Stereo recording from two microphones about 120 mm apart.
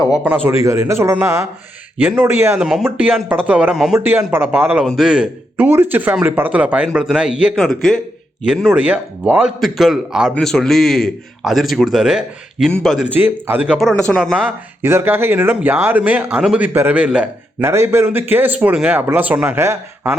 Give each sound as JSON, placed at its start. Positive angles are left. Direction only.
{"t": 0.3, "sound": "a man's voice", "side_deg": -20}
{"t": 2.5, "sound": "speech", "side_deg": -5}
{"t": 4.0, "sound": "speech", "side_deg": -15}
{"t": 4.9, "sound": "speech", "side_deg": -5}
{"t": 7.5, "sound": "a man's voice", "side_deg": 5}
{"t": 8.7, "sound": "speech", "side_deg": -10}
{"t": 9.6, "sound": "a man's voice", "side_deg": 0}
{"t": 13.2, "sound": "speech", "side_deg": -15}
{"t": 14.1, "sound": "a man's voice", "side_deg": 0}
{"t": 14.4, "sound": "speech", "side_deg": -20}
{"t": 17.6, "sound": "speech", "side_deg": -20}